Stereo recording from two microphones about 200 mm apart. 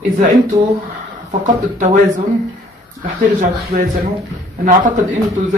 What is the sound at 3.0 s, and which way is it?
Speech, 40° right (ahead or behind).